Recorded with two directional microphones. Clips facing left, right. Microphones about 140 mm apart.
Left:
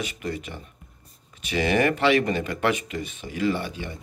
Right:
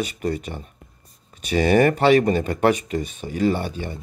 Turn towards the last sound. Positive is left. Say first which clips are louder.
# right 3 dB
turn(degrees=-40)  # may be behind; listen again after turning